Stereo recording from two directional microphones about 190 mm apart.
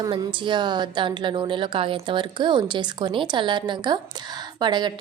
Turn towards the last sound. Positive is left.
turn(degrees=-25)  # may be behind; listen again after turning